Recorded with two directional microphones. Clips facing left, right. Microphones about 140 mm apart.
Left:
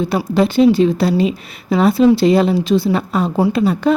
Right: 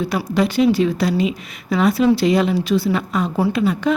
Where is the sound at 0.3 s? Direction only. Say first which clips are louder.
Left 4 dB; 30° left (ahead or behind).